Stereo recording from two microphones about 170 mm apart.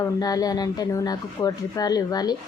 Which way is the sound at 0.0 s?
20° left (ahead or behind).